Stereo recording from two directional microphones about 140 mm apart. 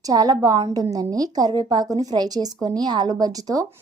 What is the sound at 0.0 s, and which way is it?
A woman's voice, 25° right (ahead or behind).